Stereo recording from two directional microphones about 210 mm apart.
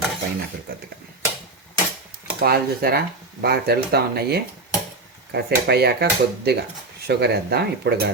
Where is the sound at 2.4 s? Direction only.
45° right (ahead or behind).